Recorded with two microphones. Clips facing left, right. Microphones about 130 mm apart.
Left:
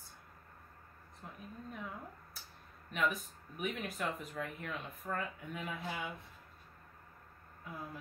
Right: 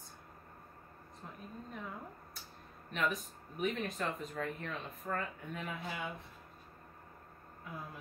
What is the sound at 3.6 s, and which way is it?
Speech, 5° left (ahead or behind).